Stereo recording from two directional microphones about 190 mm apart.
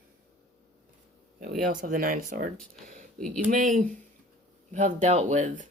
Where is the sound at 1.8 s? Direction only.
45° right (ahead or behind).